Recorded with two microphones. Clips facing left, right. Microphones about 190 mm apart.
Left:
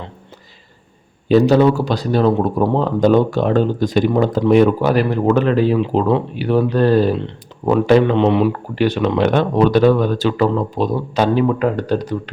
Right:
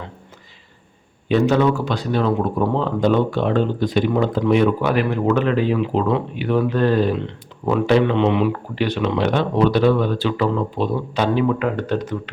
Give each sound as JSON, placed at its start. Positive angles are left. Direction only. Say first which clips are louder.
{"t": 1.3, "sound": "speech", "louder": "left 5 dB", "side_deg": 35}